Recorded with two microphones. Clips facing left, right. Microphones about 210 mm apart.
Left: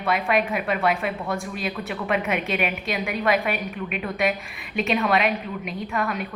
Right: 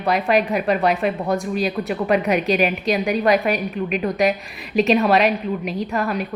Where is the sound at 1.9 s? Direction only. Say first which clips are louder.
Right 5 dB; 35° right (ahead or behind).